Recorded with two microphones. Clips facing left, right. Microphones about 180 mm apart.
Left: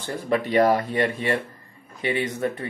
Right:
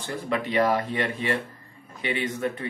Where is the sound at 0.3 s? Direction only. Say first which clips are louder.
Left 4 dB; 45° left (ahead or behind).